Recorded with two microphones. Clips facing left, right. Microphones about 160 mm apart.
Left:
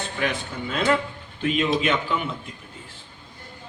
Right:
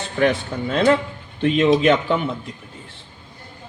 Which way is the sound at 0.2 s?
40° right (ahead or behind).